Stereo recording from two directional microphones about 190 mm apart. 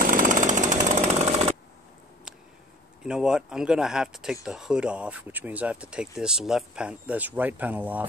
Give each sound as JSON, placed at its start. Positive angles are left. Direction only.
{"t": 0.0, "sound": "jackhammer", "side_deg": -45}
{"t": 3.0, "sound": "speech", "side_deg": -5}